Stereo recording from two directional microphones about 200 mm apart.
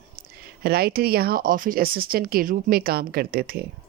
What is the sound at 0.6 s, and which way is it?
Speech, 50° right (ahead or behind).